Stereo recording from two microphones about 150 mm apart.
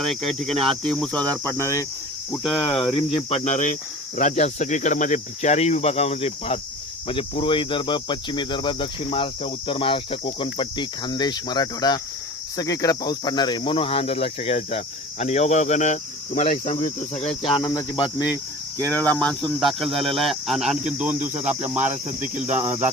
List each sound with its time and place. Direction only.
0.0 s speech: centre (ahead or behind); by 1.9 s 20° left (ahead or behind)
2.6 s cricket: 35° left (ahead or behind)
7.1 s speech: 35° left (ahead or behind)
17.6 s cricket: 25° left (ahead or behind)
18.9 s speech: 5° left (ahead or behind); by 21.3 s 10° right (ahead or behind)
22.4 s cricket: 10° right (ahead or behind)